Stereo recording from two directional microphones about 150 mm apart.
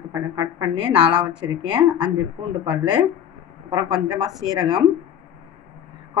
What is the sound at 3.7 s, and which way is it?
A woman's voice, 25° right (ahead or behind).